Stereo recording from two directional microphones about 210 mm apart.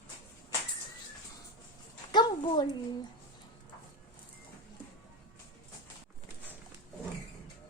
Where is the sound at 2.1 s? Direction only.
20° left (ahead or behind).